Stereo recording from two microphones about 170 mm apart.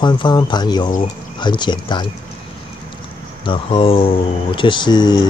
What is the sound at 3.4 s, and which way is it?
Speech, 30° left (ahead or behind).